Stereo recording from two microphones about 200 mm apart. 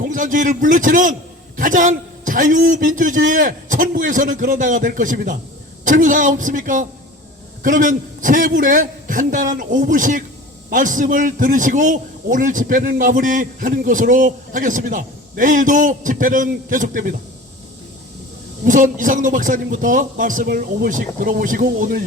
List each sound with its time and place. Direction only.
0.0 s a man's voice: 40° right (ahead or behind)
18.6 s a man's voice: 40° right (ahead or behind)